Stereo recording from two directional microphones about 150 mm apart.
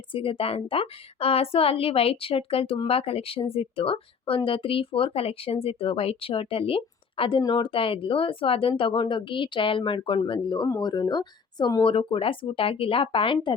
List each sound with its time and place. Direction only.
0.1 s a woman's voice: 35° left (ahead or behind)